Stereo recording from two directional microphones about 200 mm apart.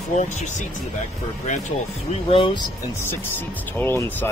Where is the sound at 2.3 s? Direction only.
25° left (ahead or behind).